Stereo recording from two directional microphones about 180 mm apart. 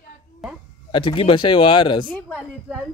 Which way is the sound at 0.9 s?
30° left (ahead or behind).